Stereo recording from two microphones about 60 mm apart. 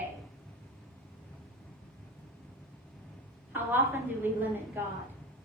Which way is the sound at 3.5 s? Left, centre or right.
Right.